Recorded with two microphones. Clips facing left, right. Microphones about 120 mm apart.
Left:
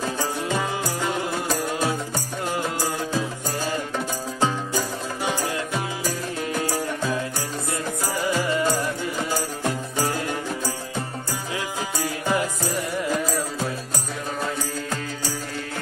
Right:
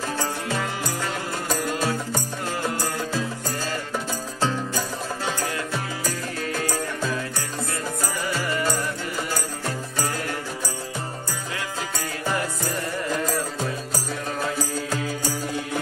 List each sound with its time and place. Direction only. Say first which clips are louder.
0.0 s music: left 1 dB; 15° left (ahead or behind)
8.2 s music: left 5 dB; 15° left (ahead or behind)
12.0 s music: left 4 dB; 15° left (ahead or behind)
13.1 s music: even; 5° left (ahead or behind)